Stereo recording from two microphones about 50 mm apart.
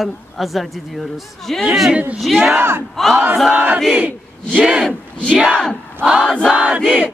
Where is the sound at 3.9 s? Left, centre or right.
Right.